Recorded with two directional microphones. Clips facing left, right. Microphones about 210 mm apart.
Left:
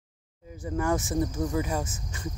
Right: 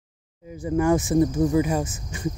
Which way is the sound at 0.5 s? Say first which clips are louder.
Right 7 dB; 15° right (ahead or behind).